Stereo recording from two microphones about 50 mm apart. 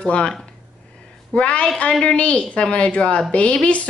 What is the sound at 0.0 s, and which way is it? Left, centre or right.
Speech, left.